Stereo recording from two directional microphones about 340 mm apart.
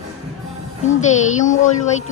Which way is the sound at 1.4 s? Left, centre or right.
Left.